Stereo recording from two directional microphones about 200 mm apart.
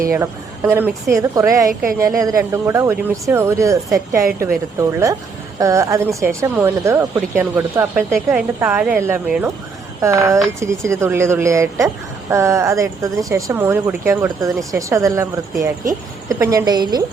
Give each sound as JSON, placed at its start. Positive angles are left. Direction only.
{"t": 0.1, "sound": "speech", "side_deg": -15}